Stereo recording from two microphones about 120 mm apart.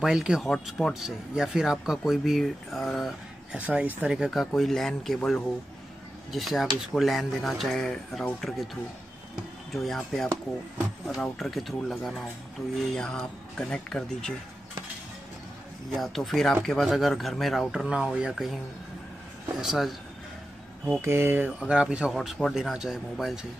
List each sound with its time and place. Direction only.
0.0 s speech: 5° right (ahead or behind)
3.5 s speech: 10° right (ahead or behind)
9.8 s speech: centre (ahead or behind)
15.9 s speech: centre (ahead or behind)
19.6 s speech: centre (ahead or behind)
21.0 s speech: 20° right (ahead or behind)
21.5 s speech: 5° right (ahead or behind)